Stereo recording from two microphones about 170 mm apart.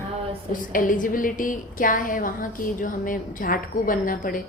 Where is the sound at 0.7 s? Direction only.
55° left (ahead or behind).